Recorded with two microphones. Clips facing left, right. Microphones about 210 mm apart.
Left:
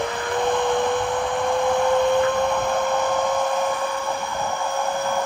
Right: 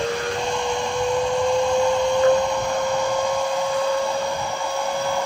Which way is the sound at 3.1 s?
15° right (ahead or behind).